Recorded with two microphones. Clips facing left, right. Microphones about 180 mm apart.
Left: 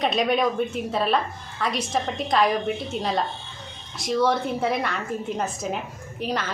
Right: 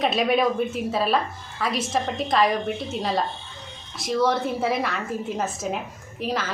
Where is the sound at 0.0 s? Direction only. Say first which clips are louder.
Right 1 dB; centre (ahead or behind).